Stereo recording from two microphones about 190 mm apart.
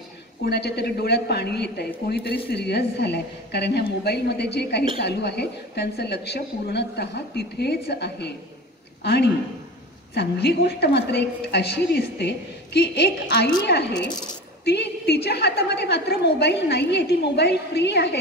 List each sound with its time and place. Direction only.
0.5 s a woman's voice: 60° left (ahead or behind)